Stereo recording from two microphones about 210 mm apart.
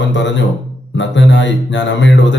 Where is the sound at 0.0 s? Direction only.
60° left (ahead or behind).